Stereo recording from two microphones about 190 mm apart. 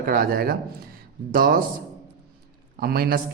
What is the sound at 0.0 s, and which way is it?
Speech, 50° right (ahead or behind).